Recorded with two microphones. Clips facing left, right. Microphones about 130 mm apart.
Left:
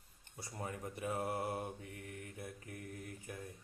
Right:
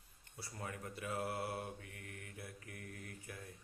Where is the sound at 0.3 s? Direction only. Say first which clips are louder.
Left 3 dB; 20° left (ahead or behind).